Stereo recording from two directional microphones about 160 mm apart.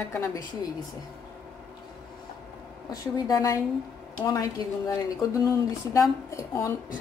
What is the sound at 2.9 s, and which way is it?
A woman's voice, 20° left (ahead or behind).